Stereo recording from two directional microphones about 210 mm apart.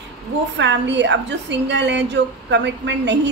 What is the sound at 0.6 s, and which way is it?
A woman's voice, 55° right (ahead or behind).